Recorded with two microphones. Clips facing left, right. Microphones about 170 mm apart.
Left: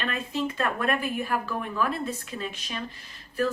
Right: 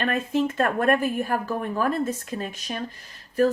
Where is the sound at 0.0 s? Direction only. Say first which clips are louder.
Right 6 dB; 45° right (ahead or behind).